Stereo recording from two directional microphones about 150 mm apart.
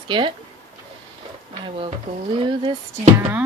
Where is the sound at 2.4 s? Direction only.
30° right (ahead or behind).